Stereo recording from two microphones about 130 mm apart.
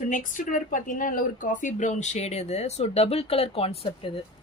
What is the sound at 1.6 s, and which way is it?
Speech, 65° left (ahead or behind).